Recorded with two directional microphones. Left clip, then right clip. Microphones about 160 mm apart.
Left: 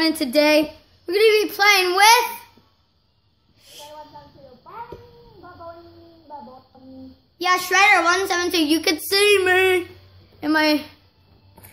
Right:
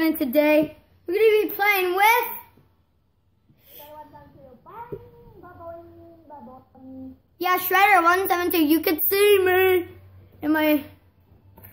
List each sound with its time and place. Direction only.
0.0 s a woman's voice: 5° right (ahead or behind)
3.6 s a sound: 5° left (ahead or behind)
7.3 s a child's voice: 25° right (ahead or behind); by 10.9 s centre (ahead or behind)